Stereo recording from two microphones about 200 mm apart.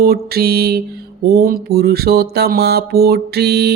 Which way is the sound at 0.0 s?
50° right (ahead or behind).